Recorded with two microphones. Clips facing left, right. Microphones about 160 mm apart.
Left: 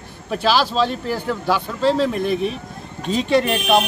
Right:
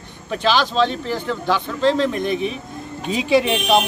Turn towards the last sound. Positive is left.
turn(degrees=0)  # may be behind; listen again after turning